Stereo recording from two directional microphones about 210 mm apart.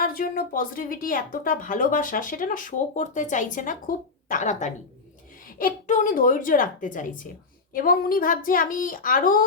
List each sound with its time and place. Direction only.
0.0 s a woman's voice: 45° left (ahead or behind)